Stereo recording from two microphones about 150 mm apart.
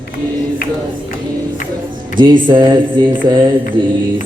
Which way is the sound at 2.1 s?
30° right (ahead or behind).